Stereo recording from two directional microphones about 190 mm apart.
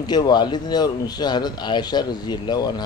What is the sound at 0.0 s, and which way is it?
Speech, 20° left (ahead or behind).